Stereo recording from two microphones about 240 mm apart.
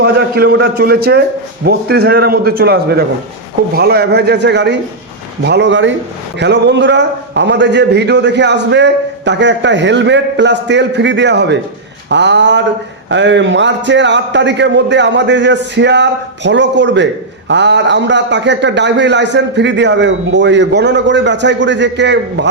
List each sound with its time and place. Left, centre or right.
0.0 s a man's voice: right